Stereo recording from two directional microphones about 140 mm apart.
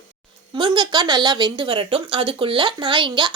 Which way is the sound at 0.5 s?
35° right (ahead or behind).